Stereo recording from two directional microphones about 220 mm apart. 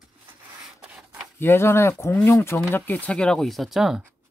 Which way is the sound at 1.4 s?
10° left (ahead or behind).